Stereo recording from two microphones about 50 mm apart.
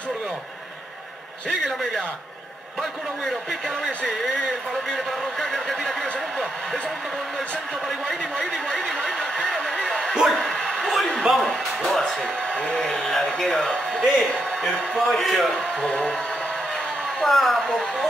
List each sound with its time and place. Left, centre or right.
1.5 s speech: centre
4.0 s speech: centre
4.9 s speech: centre
8.1 s a sound: centre
10.1 s bow-wow: centre
11.3 s a sound: centre
11.9 s speech: centre
17.2 s speech: centre